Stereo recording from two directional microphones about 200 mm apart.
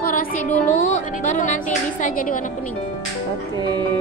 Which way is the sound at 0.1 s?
40° left (ahead or behind).